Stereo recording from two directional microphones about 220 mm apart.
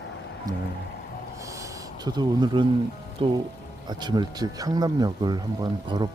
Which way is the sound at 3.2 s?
25° right (ahead or behind).